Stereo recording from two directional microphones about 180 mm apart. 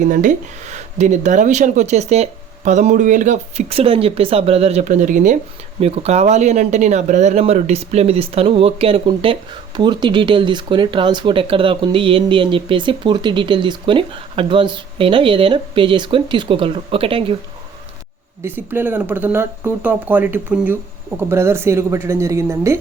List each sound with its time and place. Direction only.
0.0 s speech: 45° right (ahead or behind)
5.8 s speech: 35° right (ahead or behind)
18.4 s speech: 10° right (ahead or behind)